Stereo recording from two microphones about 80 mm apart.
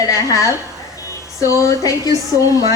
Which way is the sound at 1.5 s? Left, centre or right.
Left.